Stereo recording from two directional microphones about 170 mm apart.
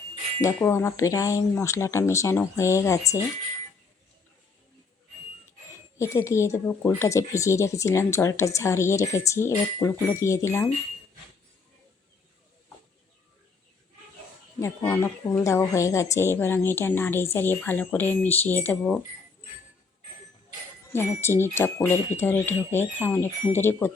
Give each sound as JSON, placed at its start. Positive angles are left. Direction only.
{"t": 0.4, "sound": "speech", "side_deg": 15}
{"t": 6.0, "sound": "speech", "side_deg": 15}
{"t": 14.6, "sound": "speech", "side_deg": 15}
{"t": 20.9, "sound": "speech", "side_deg": 15}